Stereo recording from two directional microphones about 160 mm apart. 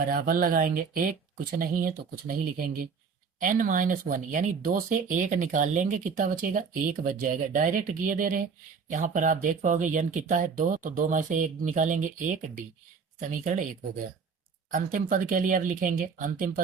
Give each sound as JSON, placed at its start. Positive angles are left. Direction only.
{"t": 0.1, "sound": "speech", "side_deg": -65}
{"t": 14.7, "sound": "speech", "side_deg": -55}